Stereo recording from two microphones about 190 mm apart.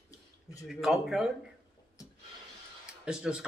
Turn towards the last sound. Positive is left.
turn(degrees=-5)  # may be behind; listen again after turning